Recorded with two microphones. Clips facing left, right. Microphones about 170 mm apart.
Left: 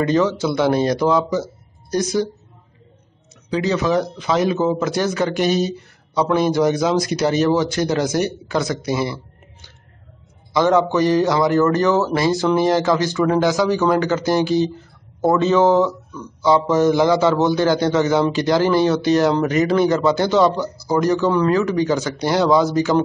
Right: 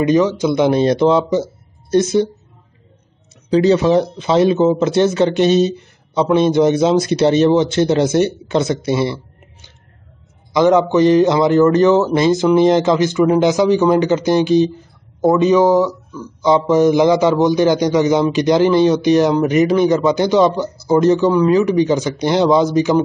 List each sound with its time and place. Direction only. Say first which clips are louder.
0.0 s speech: right 4 dB; 15° right (ahead or behind)
3.4 s speech: right 7 dB; 30° right (ahead or behind)
10.5 s speech: right 4 dB; 20° right (ahead or behind)